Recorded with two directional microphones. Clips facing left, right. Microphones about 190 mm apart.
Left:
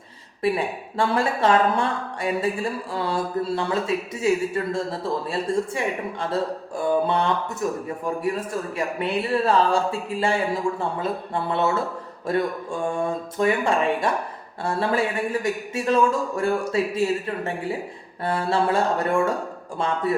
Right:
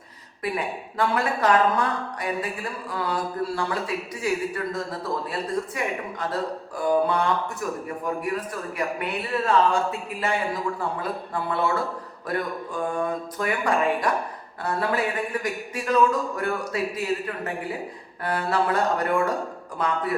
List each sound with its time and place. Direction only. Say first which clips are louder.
0.4 s speech: left 5 dB; 30° left (ahead or behind)